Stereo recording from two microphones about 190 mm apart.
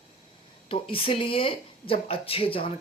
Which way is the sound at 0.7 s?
30° left (ahead or behind).